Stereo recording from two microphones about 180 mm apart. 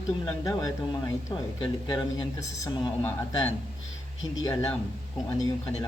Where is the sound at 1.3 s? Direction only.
25° left (ahead or behind).